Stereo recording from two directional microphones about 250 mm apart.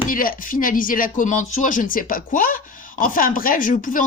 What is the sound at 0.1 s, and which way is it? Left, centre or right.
Speech, left.